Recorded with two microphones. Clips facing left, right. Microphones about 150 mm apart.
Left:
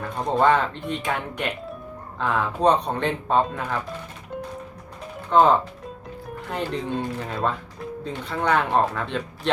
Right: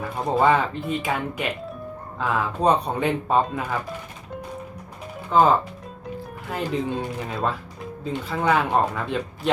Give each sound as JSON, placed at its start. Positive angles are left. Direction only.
{"t": 0.0, "sound": "speech", "side_deg": -5}
{"t": 5.3, "sound": "speech", "side_deg": -5}